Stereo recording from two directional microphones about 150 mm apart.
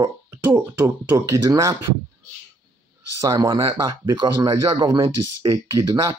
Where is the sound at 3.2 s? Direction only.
25° right (ahead or behind).